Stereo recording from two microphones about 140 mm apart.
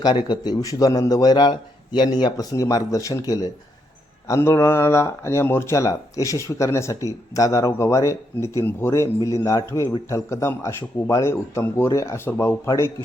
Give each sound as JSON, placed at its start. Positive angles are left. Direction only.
{"t": 0.0, "sound": "speech", "side_deg": 30}